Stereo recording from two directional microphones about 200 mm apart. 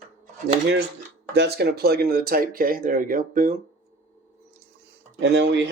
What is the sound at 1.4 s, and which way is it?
Speech, 55° right (ahead or behind).